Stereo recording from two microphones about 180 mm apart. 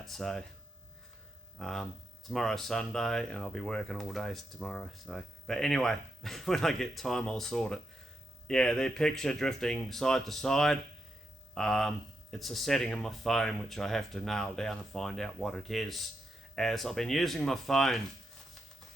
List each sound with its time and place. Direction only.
0.0 s speech: centre (ahead or behind)
1.5 s speech: centre (ahead or behind)